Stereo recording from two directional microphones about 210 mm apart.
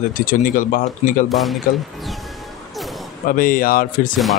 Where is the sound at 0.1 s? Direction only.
40° left (ahead or behind).